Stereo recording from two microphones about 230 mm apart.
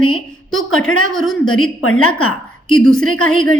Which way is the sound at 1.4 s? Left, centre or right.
Left.